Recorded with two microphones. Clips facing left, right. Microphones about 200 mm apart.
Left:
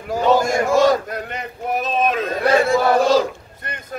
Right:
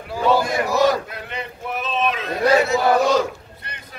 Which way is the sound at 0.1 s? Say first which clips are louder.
Left 3 dB; 45° left (ahead or behind).